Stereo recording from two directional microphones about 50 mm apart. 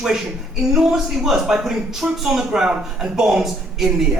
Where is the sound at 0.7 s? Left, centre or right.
Centre.